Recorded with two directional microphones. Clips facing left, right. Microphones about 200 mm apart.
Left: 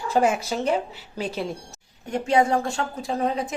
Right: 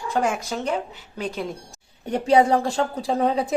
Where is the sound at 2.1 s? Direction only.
35° right (ahead or behind).